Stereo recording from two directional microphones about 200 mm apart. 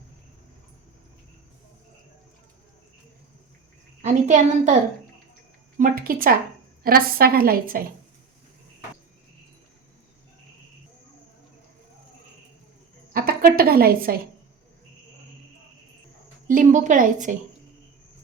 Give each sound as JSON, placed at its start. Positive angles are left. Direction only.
{"t": 4.0, "sound": "a woman's voice", "side_deg": -35}
{"t": 5.8, "sound": "a woman's voice", "side_deg": -45}
{"t": 13.1, "sound": "a woman's voice", "side_deg": -50}
{"t": 16.5, "sound": "a woman's voice", "side_deg": -40}